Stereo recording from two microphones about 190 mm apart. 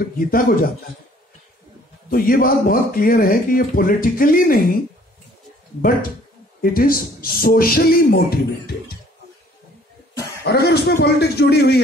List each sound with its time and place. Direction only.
0.0 s a man's voice: 50° left (ahead or behind)
2.0 s a man's voice: 50° left (ahead or behind)
6.6 s a man's voice: 50° left (ahead or behind)
10.4 s a man's voice: 60° left (ahead or behind)